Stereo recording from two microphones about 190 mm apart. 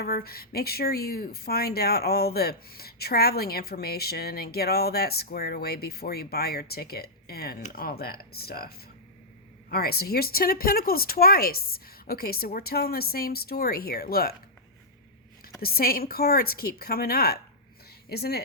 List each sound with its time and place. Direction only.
0.0 s speech: 55° left (ahead or behind)
15.6 s speech: 50° left (ahead or behind)